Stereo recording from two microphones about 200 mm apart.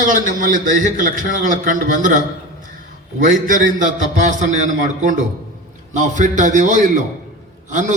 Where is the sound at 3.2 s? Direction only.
40° right (ahead or behind).